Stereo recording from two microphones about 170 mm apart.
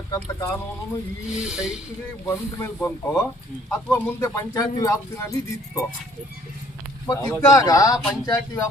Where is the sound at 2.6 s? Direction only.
15° left (ahead or behind).